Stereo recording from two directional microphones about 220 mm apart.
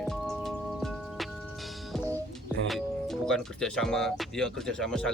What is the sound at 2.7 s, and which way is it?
Speech, centre (ahead or behind).